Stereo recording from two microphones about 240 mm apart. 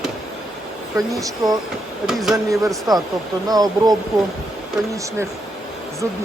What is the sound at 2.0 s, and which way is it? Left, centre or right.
Speech, centre.